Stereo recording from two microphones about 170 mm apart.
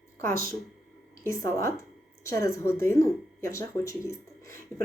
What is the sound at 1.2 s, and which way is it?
Speech, 15° left (ahead or behind).